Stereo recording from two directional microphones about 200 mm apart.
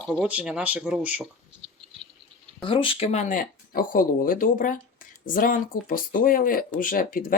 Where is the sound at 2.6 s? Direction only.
25° left (ahead or behind).